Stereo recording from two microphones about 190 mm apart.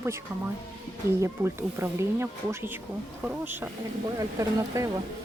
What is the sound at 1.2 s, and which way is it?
Speech, 15° right (ahead or behind).